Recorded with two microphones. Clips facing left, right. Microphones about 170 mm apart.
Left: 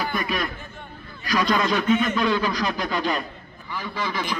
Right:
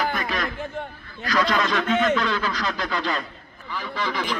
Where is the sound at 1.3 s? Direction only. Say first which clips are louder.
Left 1 dB; 20° left (ahead or behind).